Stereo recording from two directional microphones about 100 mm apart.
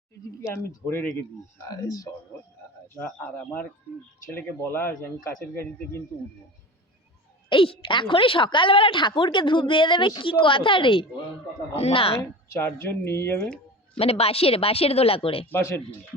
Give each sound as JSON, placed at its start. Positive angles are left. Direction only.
{"t": 0.5, "sound": "speech", "side_deg": 25}
{"t": 1.6, "sound": "speech", "side_deg": 35}
{"t": 3.0, "sound": "speech", "side_deg": 20}
{"t": 7.5, "sound": "a woman's voice", "side_deg": 65}
{"t": 11.7, "sound": "speech", "side_deg": 85}
{"t": 12.5, "sound": "speech", "side_deg": 25}
{"t": 13.9, "sound": "a woman's voice", "side_deg": 80}